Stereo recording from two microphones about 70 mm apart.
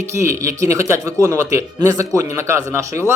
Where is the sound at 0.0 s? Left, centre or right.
Right.